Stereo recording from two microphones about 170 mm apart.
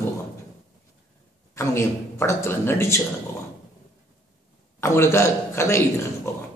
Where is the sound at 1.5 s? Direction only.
15° left (ahead or behind).